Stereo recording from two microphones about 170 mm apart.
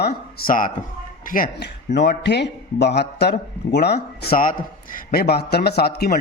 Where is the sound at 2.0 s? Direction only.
85° left.